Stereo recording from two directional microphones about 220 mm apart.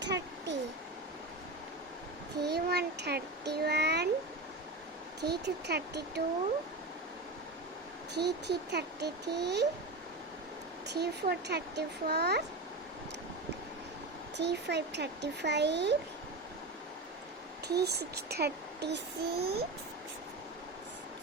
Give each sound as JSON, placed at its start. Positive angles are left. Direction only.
{"t": 0.0, "sound": "a sound", "side_deg": -50}
{"t": 2.4, "sound": "a child's voice", "side_deg": -50}
{"t": 5.2, "sound": "a child's voice", "side_deg": -50}
{"t": 8.1, "sound": "a child's voice", "side_deg": -50}
{"t": 10.9, "sound": "a child's voice", "side_deg": -50}
{"t": 14.3, "sound": "a child's voice", "side_deg": -50}
{"t": 17.7, "sound": "a child's voice", "side_deg": -50}